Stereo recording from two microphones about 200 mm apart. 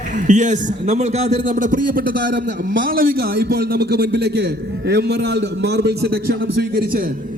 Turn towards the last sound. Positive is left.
turn(degrees=-45)  # may be behind; listen again after turning